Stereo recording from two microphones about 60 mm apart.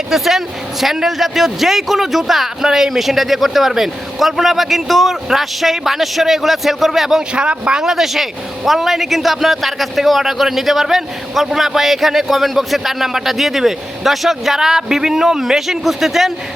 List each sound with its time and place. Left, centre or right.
0.1 s speech: centre
7.3 s speech: centre